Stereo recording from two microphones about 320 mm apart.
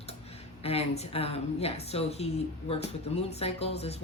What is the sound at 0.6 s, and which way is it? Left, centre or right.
A woman's voice, centre.